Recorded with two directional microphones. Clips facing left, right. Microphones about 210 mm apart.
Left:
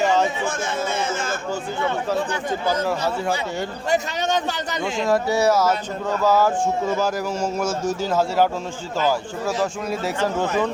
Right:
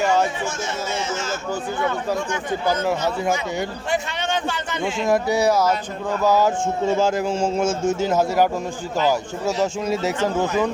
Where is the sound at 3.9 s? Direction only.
40° left (ahead or behind).